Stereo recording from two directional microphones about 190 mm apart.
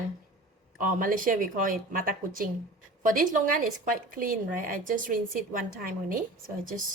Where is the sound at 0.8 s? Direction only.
45° right (ahead or behind).